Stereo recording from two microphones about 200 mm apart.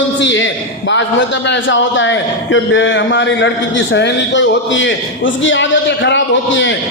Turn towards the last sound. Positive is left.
turn(degrees=65)  # may be behind; listen again after turning